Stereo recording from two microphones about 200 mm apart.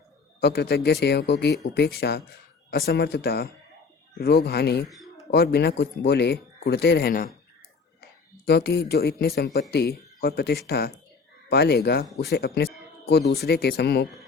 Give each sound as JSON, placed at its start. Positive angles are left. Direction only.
{"t": 0.3, "sound": "speech", "side_deg": 55}
{"t": 8.4, "sound": "speech", "side_deg": 55}